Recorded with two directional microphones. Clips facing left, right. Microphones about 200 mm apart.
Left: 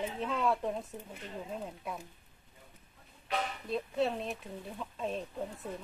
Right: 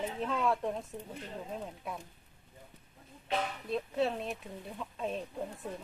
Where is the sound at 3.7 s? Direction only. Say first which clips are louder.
Even; centre (ahead or behind).